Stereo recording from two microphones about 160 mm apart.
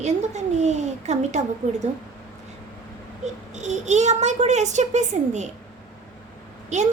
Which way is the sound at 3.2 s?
45° right (ahead or behind).